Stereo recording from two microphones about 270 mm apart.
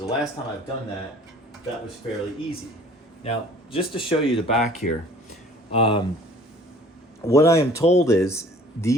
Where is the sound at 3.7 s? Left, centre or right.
Centre.